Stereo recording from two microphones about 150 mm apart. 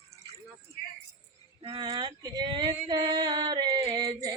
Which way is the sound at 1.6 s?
35° right (ahead or behind).